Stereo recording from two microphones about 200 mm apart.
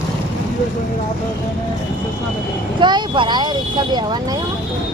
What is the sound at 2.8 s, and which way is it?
Speech, 25° right (ahead or behind).